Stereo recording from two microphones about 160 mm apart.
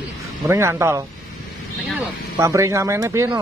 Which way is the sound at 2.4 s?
20° right (ahead or behind).